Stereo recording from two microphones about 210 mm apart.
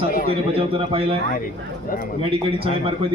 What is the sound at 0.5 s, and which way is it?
Speech, 25° right (ahead or behind).